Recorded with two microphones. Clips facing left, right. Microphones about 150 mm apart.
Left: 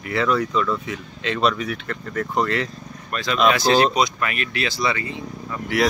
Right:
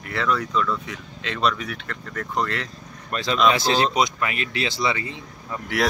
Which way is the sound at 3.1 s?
30° right (ahead or behind).